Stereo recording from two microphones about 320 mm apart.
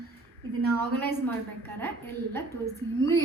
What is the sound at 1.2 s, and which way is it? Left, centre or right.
A woman's voice, centre.